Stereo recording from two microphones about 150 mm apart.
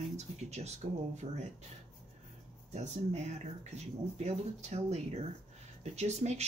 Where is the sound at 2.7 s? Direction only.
50° right (ahead or behind).